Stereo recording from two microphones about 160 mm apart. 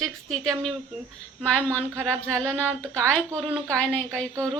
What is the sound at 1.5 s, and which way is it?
A woman's voice, 10° left (ahead or behind).